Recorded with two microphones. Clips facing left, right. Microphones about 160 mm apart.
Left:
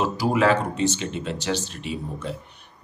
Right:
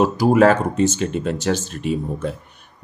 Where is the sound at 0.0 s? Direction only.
45° right (ahead or behind).